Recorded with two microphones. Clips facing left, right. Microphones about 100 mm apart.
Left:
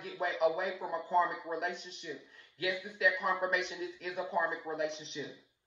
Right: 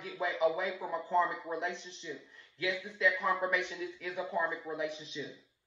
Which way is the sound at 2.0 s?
15° left (ahead or behind).